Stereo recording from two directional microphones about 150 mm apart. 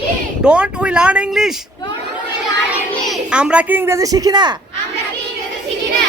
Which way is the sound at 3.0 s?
5° right (ahead or behind).